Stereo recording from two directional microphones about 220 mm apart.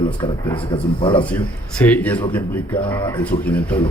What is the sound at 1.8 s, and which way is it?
Speech, 10° left (ahead or behind).